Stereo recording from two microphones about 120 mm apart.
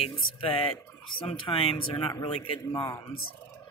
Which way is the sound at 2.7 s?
25° left (ahead or behind).